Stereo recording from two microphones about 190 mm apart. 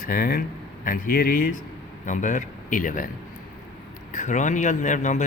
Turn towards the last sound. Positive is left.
turn(degrees=40)  # may be behind; listen again after turning